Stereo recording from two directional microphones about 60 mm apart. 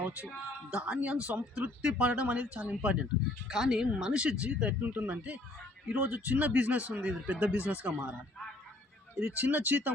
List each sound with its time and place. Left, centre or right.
0.0 s speech: right
3.5 s speech: centre; by 8.1 s right
9.1 s speech: right